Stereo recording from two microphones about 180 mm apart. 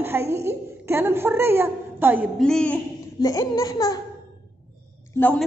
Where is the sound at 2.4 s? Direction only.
5° left (ahead or behind).